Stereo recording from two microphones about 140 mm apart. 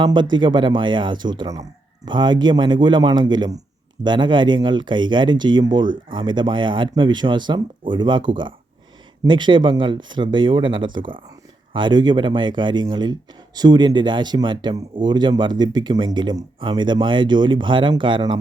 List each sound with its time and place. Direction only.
0.0 s speech: 35° right (ahead or behind)